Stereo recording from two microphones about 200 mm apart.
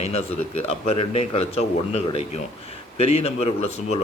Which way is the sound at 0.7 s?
30° left (ahead or behind).